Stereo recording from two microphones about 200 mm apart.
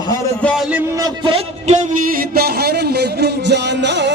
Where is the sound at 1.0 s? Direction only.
25° right (ahead or behind).